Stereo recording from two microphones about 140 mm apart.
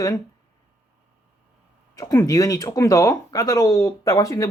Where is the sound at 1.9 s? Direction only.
25° left (ahead or behind).